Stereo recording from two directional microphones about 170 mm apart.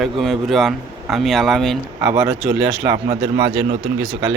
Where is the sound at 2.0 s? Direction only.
10° right (ahead or behind).